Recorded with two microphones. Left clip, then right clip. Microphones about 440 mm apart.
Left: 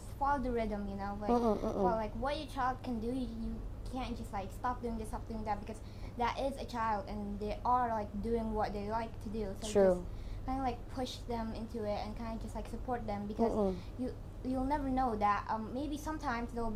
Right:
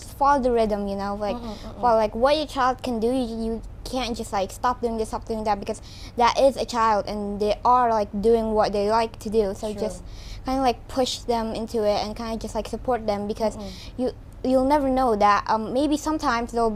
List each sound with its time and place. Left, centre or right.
0.2 s a woman's voice: right
10.4 s a woman's voice: right